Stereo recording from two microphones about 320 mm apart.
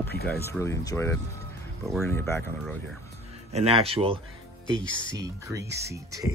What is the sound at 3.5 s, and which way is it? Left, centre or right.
Speech, centre.